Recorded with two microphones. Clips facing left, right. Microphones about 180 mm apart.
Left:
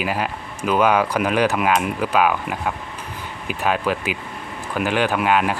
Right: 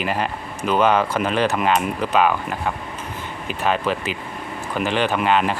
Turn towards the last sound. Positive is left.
turn(degrees=5)  # may be behind; listen again after turning